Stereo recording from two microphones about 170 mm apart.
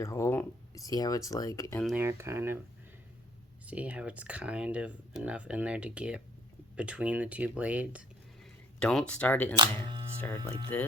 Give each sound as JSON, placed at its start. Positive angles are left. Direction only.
{"t": 0.0, "sound": "speech", "side_deg": 15}
{"t": 2.0, "sound": "speech", "side_deg": -15}
{"t": 3.7, "sound": "speech", "side_deg": -10}
{"t": 8.8, "sound": "speech", "side_deg": 5}